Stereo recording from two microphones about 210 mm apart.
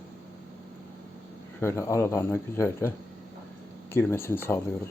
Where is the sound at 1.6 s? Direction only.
15° left (ahead or behind).